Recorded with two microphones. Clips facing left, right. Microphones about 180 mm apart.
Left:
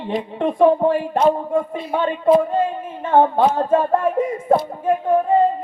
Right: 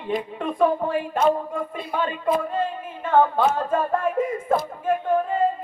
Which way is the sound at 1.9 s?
25° left (ahead or behind).